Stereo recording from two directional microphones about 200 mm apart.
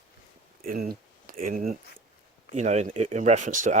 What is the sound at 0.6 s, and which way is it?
Speech, 45° right (ahead or behind).